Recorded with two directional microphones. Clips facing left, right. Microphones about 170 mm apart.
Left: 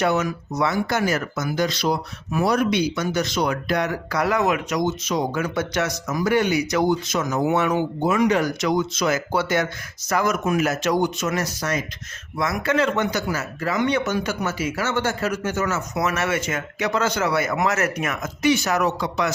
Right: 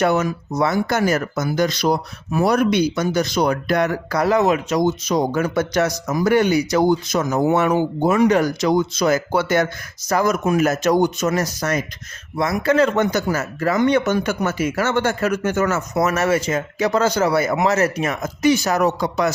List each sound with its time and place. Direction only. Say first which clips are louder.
0.0 s speech: right 3 dB; 40° right (ahead or behind)
0.3 s speech: right 3 dB; 30° right (ahead or behind)
0.7 s speech: right 4 dB; 45° right (ahead or behind)
10.7 s speech: right 4 dB; 45° right (ahead or behind)